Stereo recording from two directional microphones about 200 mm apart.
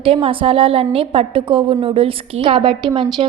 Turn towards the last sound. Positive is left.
turn(degrees=-25)  # may be behind; listen again after turning